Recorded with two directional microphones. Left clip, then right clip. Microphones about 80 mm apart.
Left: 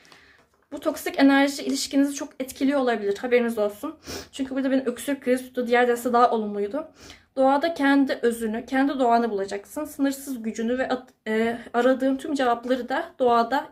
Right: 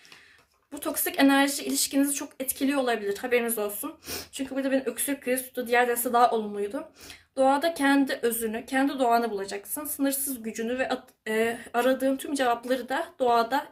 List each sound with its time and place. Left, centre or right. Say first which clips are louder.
0.7 s speech: left 4 dB; left
4.9 s speech: left 4 dB; left